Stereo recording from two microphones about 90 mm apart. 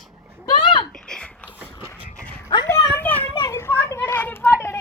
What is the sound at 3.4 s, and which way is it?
Children playing, 35° left (ahead or behind).